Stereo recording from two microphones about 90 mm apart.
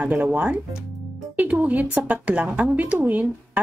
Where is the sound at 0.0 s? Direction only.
15° right (ahead or behind).